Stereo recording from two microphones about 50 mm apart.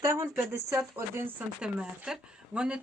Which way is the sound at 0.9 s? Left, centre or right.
Right.